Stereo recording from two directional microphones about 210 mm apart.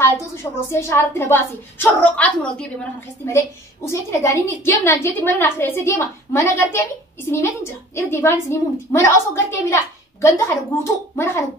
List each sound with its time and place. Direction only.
0.4 s a woman's voice: 10° left (ahead or behind)
10.8 s a woman's voice: 10° left (ahead or behind)